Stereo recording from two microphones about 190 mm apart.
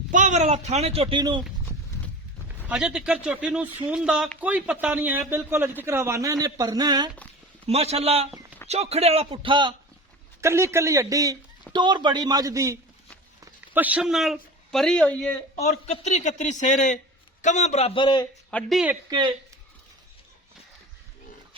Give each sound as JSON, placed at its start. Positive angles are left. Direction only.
{"t": 0.1, "sound": "speech", "side_deg": -40}
{"t": 2.6, "sound": "speech", "side_deg": -5}
{"t": 7.7, "sound": "speech", "side_deg": -30}
{"t": 10.4, "sound": "a man's voice", "side_deg": -15}
{"t": 15.5, "sound": "speech", "side_deg": 35}
{"t": 18.5, "sound": "speech", "side_deg": 0}